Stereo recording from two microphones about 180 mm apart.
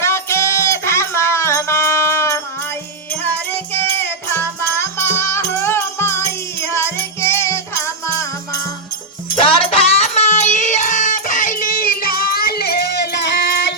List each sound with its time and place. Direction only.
0.0 s music: 15° left (ahead or behind)
9.3 s music: 30° left (ahead or behind); by 13.7 s 70° left (ahead or behind)